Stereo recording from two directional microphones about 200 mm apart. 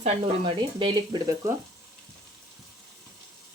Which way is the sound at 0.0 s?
25° right (ahead or behind).